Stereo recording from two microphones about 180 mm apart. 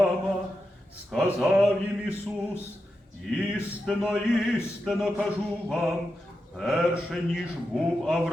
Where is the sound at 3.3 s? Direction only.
5° right (ahead or behind).